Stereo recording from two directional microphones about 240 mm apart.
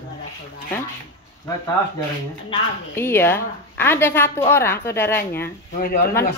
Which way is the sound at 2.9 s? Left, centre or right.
Centre.